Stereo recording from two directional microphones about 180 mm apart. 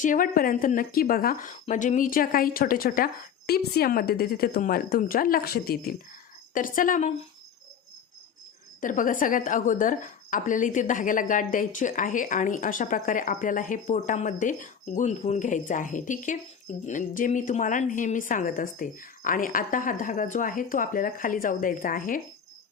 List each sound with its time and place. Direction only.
0.0 s a woman's voice: 50° left (ahead or behind)
8.8 s a woman's voice: 45° left (ahead or behind)